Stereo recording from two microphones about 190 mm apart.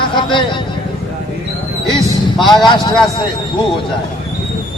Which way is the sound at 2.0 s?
Centre (ahead or behind).